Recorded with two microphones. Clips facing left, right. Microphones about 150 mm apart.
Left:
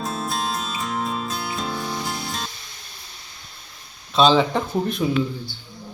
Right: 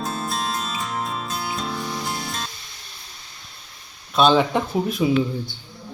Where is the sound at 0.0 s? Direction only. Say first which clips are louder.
Even; centre (ahead or behind).